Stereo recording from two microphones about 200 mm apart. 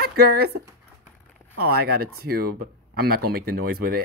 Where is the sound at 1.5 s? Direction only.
50° right (ahead or behind).